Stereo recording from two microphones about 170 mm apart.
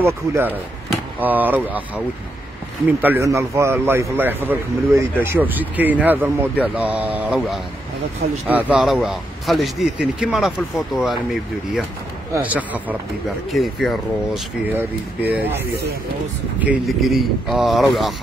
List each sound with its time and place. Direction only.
0.0 s a man's voice: 15° right (ahead or behind)
2.9 s a man's voice: 10° right (ahead or behind)
12.4 s a man's voice: 10° right (ahead or behind)
14.7 s a man's voice: 10° right (ahead or behind)
16.5 s a man's voice: 5° right (ahead or behind)